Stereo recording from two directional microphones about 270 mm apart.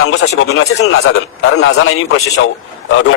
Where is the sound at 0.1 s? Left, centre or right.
Left.